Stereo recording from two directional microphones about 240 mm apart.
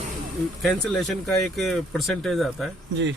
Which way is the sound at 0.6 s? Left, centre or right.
Centre.